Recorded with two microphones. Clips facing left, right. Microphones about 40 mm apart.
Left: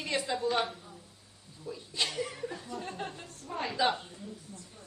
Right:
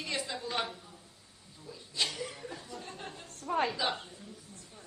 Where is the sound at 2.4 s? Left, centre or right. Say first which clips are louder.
Left 5 dB; centre.